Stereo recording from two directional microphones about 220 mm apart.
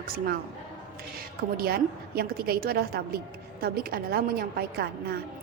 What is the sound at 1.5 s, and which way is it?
A woman's voice, 45° right (ahead or behind).